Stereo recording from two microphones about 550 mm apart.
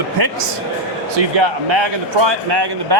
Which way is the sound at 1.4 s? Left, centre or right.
Right.